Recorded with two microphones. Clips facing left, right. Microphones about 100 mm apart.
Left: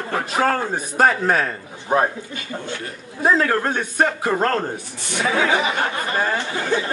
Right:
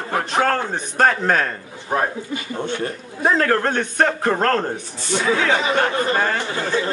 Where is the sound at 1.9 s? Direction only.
20° left (ahead or behind).